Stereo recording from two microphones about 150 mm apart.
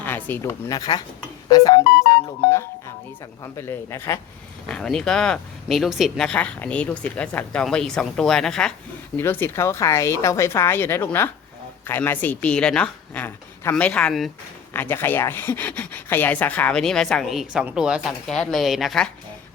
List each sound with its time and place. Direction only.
0.0 s a sound: 15° left (ahead or behind)
0.7 s speech: 25° left (ahead or behind)
3.4 s speech: 15° left (ahead or behind)
4.7 s speech: 5° left (ahead or behind)
14.7 s speech: 15° left (ahead or behind)